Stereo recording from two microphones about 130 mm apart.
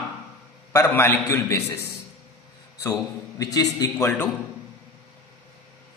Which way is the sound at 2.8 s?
25° left (ahead or behind).